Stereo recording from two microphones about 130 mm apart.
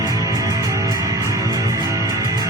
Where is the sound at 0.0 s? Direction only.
25° right (ahead or behind).